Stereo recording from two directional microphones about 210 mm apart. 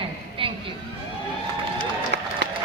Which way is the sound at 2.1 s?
50° right (ahead or behind).